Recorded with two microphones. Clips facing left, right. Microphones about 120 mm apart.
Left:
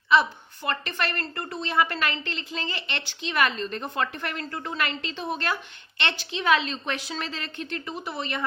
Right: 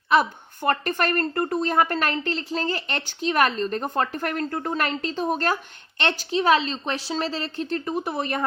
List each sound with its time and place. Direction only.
0.1 s a woman's voice: 50° right (ahead or behind)